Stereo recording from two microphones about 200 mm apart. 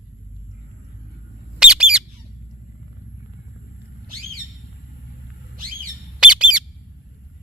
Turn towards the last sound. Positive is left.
turn(degrees=-5)  # may be behind; listen again after turning